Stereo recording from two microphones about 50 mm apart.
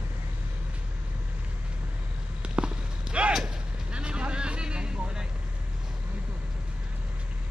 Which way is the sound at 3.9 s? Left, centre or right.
Right.